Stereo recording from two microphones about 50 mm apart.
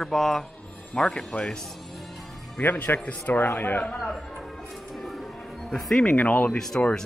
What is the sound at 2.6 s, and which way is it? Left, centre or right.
Speech, left.